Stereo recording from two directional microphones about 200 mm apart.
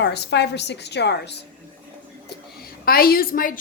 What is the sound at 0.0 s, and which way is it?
A woman's voice, 60° left (ahead or behind).